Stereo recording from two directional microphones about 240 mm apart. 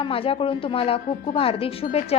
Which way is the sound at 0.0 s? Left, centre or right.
Left.